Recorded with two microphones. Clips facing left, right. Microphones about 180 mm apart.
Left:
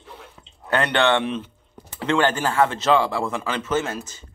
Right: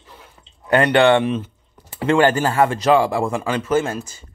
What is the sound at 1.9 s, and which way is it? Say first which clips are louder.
Speech: right 5 dB; 10° right (ahead or behind).